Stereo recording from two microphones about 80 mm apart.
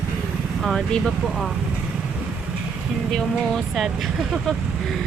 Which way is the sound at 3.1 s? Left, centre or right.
Centre.